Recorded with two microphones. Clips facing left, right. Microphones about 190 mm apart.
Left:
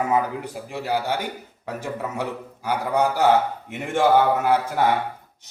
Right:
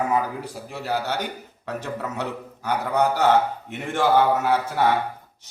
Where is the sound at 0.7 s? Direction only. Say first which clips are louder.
Left 2 dB; 15° left (ahead or behind).